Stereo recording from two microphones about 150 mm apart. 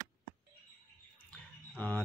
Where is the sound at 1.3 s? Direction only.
10° left (ahead or behind).